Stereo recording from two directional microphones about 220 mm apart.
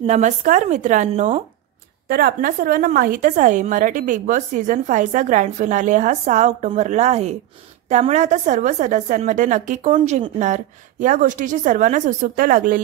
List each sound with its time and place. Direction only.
0.0 s a woman's voice: 35° right (ahead or behind)
2.0 s a woman's voice: 45° right (ahead or behind)